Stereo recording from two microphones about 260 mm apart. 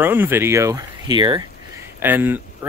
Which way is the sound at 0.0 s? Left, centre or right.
Centre.